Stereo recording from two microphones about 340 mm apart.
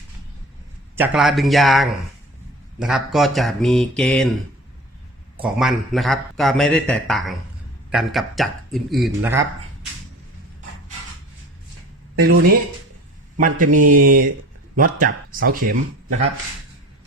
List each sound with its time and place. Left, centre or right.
0.9 s a man's voice: centre
5.4 s a man's voice: centre
12.1 s speech: right
13.7 s speech: right